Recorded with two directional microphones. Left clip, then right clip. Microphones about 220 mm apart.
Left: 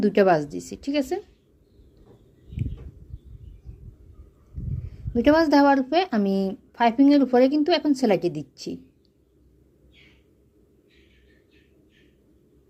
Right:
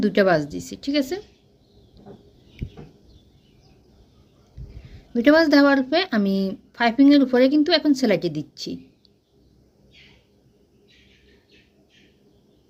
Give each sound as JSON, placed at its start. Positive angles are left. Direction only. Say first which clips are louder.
{"t": 0.0, "sound": "speech", "louder": "even", "side_deg": 10}
{"t": 4.6, "sound": "a sound", "louder": "left 7 dB", "side_deg": 10}
{"t": 5.1, "sound": "speech", "louder": "right 2 dB", "side_deg": 10}